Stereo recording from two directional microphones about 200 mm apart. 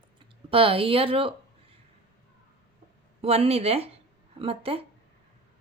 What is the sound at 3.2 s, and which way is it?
A woman's voice, 30° right (ahead or behind).